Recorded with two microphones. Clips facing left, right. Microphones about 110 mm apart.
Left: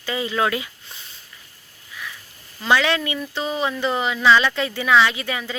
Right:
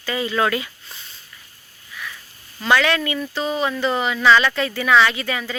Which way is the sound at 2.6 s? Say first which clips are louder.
Right 1 dB; 20° left (ahead or behind).